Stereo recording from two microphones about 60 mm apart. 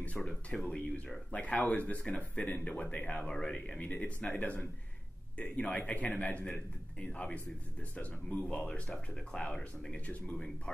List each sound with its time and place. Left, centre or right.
0.0 s speech: centre
6.4 s a man's voice: centre
7.2 s speech: left